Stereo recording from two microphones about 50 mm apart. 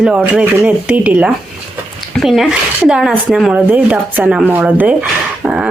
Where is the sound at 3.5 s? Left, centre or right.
Right.